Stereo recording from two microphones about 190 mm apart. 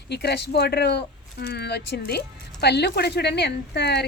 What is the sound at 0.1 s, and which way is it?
Speech, 60° left (ahead or behind).